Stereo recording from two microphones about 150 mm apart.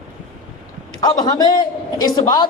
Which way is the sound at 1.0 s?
25° left (ahead or behind).